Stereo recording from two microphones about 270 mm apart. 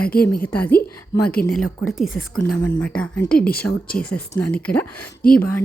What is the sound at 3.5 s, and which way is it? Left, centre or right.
Speech, left.